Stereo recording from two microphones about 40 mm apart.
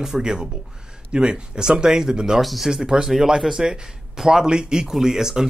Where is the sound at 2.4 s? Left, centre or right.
Centre.